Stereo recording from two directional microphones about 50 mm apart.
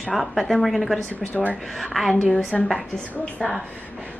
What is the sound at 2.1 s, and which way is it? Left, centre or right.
Speech, centre.